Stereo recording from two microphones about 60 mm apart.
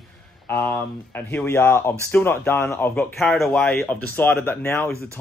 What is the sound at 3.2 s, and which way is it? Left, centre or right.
Speech, centre.